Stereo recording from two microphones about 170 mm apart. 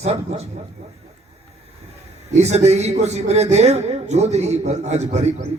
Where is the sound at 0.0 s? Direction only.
40° right (ahead or behind).